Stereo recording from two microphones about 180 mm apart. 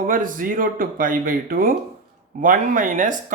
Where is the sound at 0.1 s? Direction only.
50° right (ahead or behind).